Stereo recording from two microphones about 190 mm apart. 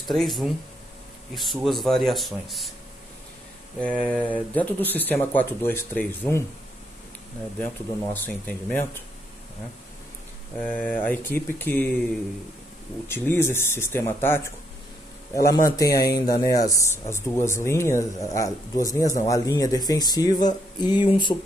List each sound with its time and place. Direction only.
0.1 s speech: centre (ahead or behind)
3.8 s speech: 5° left (ahead or behind)
7.6 s speech: 10° left (ahead or behind)
10.6 s speech: 10° left (ahead or behind)
13.1 s speech: 10° left (ahead or behind)